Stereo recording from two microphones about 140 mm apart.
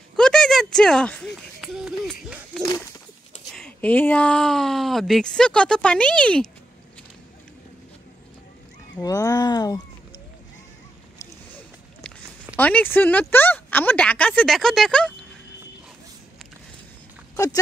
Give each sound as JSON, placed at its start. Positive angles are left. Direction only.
{"t": 0.1, "sound": "a sound", "side_deg": 5}
{"t": 3.5, "sound": "speech", "side_deg": 10}
{"t": 9.0, "sound": "speech", "side_deg": 25}
{"t": 12.5, "sound": "speech", "side_deg": 10}